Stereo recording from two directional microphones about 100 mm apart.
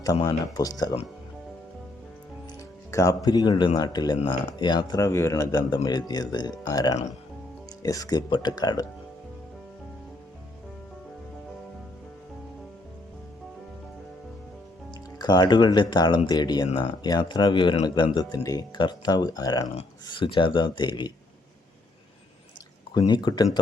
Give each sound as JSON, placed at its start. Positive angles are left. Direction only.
{"t": 0.0, "sound": "speech", "side_deg": 40}
{"t": 2.6, "sound": "speech", "side_deg": 35}
{"t": 15.2, "sound": "speech", "side_deg": 45}
{"t": 20.1, "sound": "speech", "side_deg": 55}
{"t": 23.0, "sound": "speech", "side_deg": 45}